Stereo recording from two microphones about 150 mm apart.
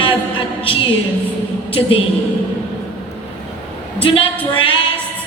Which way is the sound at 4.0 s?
35° left (ahead or behind).